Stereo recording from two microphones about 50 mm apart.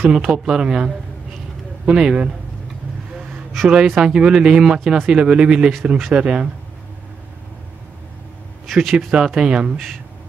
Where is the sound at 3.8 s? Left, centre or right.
Centre; by 6.4 s right.